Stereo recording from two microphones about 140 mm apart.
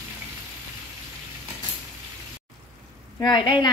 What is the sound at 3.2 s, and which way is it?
Speech, 30° left (ahead or behind).